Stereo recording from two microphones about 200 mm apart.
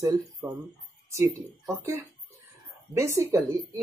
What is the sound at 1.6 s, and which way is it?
Speech, 15° right (ahead or behind).